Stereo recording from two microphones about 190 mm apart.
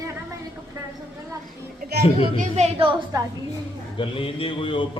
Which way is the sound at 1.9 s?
40° right (ahead or behind).